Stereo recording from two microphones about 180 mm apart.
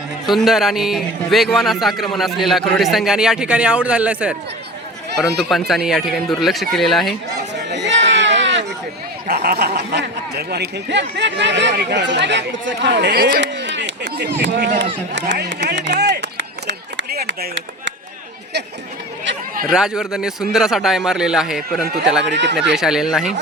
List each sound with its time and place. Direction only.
0.3 s a man's voice: centre (ahead or behind)
5.4 s a man's voice: centre (ahead or behind)
7.7 s a sound: 80° right
9.3 s speech: 65° right (ahead or behind)
15.1 s run: 75° right (ahead or behind)
19.6 s a man's voice: 5° right (ahead or behind)
22.3 s speech: 75° right (ahead or behind)
22.5 s a man's voice: 5° right (ahead or behind)